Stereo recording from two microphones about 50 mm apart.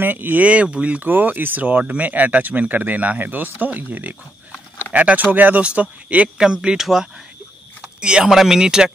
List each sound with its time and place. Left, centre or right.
0.0 s speech: right
1.0 s speech: right
6.3 s speech: centre